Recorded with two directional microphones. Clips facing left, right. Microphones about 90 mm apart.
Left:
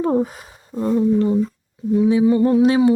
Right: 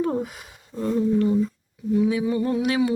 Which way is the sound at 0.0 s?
30° left (ahead or behind).